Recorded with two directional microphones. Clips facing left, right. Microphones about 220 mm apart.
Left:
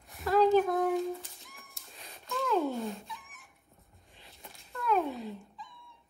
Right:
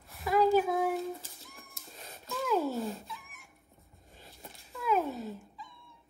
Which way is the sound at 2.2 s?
Centre (ahead or behind).